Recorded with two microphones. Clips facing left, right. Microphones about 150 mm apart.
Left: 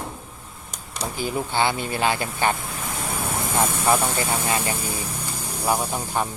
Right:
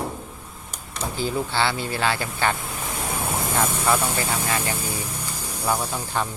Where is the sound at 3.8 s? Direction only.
25° left (ahead or behind).